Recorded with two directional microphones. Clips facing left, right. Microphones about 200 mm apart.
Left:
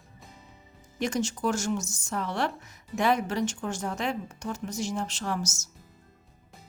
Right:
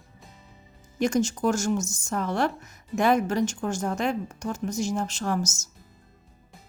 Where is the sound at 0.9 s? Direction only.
45° right (ahead or behind).